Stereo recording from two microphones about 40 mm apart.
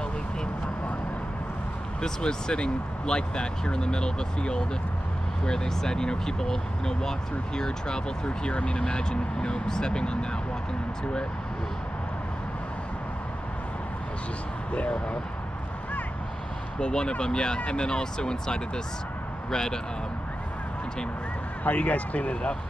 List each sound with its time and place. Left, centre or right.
2.0 s speech: centre
14.7 s speech: left
16.8 s speech: left
21.6 s speech: left